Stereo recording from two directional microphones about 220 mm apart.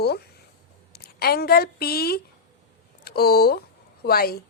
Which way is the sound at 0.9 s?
45° left (ahead or behind).